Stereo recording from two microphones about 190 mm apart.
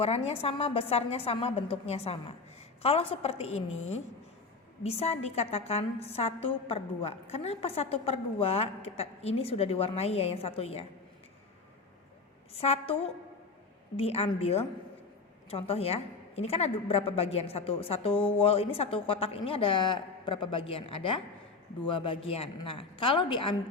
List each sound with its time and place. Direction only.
0.0 s a woman's voice: 35° left (ahead or behind)
4.8 s a woman's voice: 35° left (ahead or behind)
12.5 s a woman's voice: 35° left (ahead or behind)